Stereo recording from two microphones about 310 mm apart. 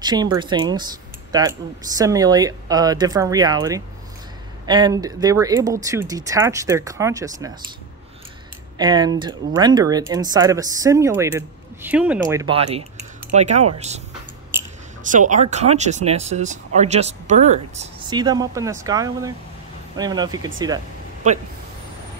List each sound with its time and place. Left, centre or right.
0.0 s speech: centre
8.7 s speech: centre
15.0 s speech: right